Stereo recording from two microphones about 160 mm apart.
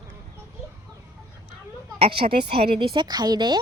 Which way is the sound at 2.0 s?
35° right (ahead or behind).